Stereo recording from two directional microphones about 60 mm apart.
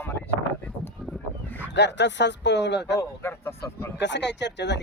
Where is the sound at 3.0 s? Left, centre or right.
Left.